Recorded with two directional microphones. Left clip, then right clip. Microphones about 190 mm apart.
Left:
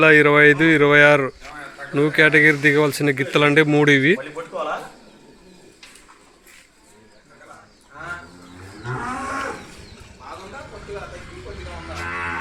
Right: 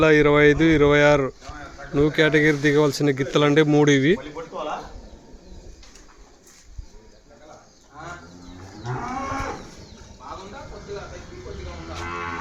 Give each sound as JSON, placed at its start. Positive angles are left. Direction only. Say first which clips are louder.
{"t": 0.0, "sound": "speech", "louder": "left 4 dB", "side_deg": -5}
{"t": 8.8, "sound": "a sound", "louder": "left 2 dB", "side_deg": -40}
{"t": 11.9, "sound": "livestock", "louder": "left 3 dB", "side_deg": -45}